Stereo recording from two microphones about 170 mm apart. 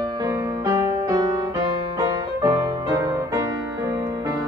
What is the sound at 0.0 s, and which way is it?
Music, 20° right (ahead or behind).